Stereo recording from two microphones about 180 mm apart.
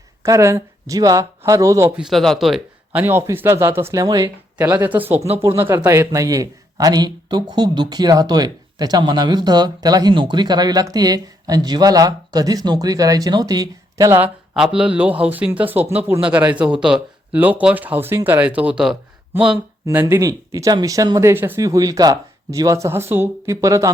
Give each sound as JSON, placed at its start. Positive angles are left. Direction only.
{"t": 0.2, "sound": "speech", "side_deg": -15}
{"t": 2.0, "sound": "speech", "side_deg": 0}
{"t": 14.5, "sound": "speech", "side_deg": -5}
{"t": 19.8, "sound": "speech", "side_deg": -15}